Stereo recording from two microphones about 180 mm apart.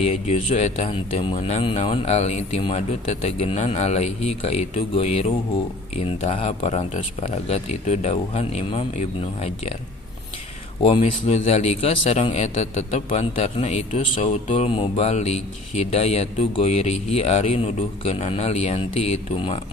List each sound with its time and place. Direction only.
0.0 s speech: 35° left (ahead or behind)
11.0 s speech: 35° left (ahead or behind)